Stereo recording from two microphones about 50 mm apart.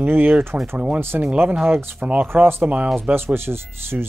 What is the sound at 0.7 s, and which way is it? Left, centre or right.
Speech, right.